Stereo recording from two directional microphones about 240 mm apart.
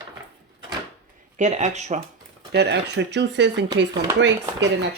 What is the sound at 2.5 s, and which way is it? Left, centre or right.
Speech, right.